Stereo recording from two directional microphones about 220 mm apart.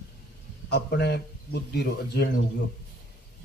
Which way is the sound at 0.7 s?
50° left (ahead or behind).